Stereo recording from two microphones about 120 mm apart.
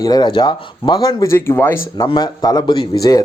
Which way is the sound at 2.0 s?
35° left (ahead or behind).